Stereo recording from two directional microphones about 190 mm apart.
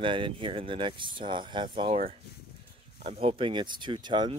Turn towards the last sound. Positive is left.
turn(degrees=-25)  # may be behind; listen again after turning